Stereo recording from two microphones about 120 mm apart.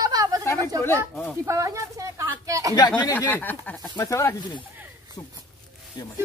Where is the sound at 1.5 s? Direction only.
25° right (ahead or behind).